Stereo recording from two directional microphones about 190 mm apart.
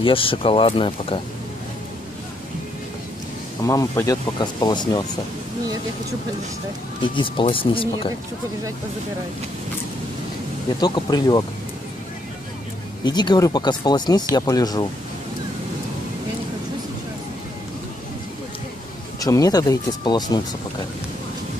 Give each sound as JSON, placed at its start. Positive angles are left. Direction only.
{"t": 0.0, "sound": "speech", "side_deg": 30}
{"t": 3.6, "sound": "speech", "side_deg": 15}
{"t": 7.2, "sound": "speech", "side_deg": 25}
{"t": 10.8, "sound": "speech", "side_deg": 20}
{"t": 13.0, "sound": "speech", "side_deg": 20}
{"t": 19.1, "sound": "speech", "side_deg": 20}